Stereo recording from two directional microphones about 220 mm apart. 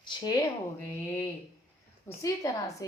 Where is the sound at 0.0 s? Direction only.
20° left (ahead or behind).